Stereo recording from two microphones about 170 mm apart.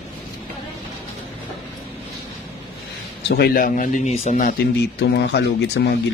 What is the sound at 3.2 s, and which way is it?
Speech, 70° left (ahead or behind).